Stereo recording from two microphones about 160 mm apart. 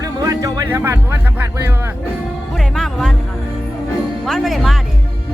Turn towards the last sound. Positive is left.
turn(degrees=0)  # may be behind; listen again after turning